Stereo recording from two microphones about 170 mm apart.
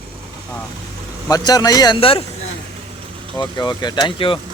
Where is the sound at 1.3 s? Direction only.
20° left (ahead or behind).